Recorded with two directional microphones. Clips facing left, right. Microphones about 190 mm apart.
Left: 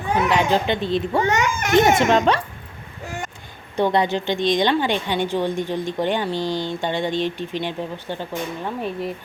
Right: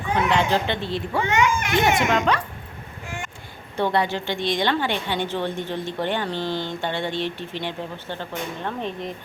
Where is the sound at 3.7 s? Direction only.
20° left (ahead or behind).